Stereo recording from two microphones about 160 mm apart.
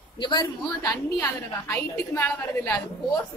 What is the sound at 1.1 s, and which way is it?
A woman's voice, 20° left (ahead or behind).